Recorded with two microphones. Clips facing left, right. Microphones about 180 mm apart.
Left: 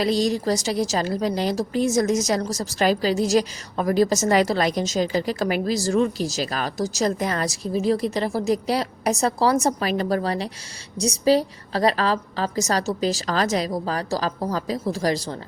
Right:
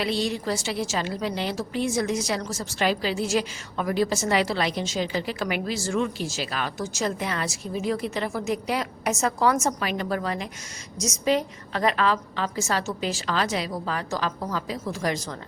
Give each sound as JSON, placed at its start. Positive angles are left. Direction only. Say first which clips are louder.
{"t": 0.0, "sound": "a woman's voice", "louder": "left 5 dB", "side_deg": 40}